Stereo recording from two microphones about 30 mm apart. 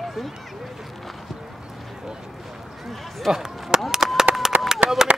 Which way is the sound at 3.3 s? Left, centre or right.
Centre.